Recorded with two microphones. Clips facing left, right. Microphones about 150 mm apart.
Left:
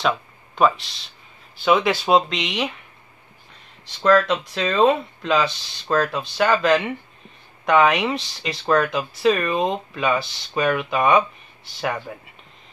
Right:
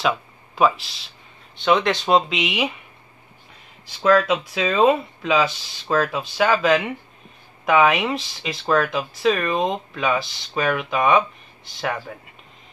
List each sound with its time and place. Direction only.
0.0 s speech: centre (ahead or behind)
3.8 s speech: 5° right (ahead or behind)